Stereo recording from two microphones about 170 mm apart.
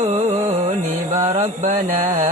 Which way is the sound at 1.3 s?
45° right (ahead or behind).